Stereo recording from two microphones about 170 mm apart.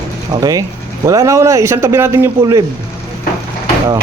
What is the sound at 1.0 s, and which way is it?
Speech, 20° right (ahead or behind).